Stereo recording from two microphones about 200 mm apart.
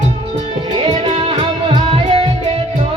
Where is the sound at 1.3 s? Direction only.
25° right (ahead or behind).